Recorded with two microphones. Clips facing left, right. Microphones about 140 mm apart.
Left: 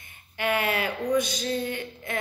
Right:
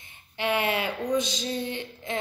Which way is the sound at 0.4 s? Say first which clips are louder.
Even; 20° right (ahead or behind).